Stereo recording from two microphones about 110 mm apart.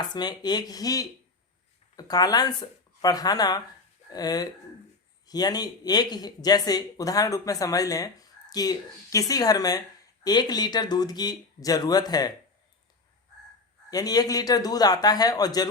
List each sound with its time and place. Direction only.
0.1 s speech: 40° left (ahead or behind)
13.9 s speech: 35° left (ahead or behind)